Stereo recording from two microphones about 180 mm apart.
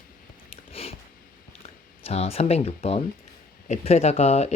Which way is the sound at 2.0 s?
35° left (ahead or behind).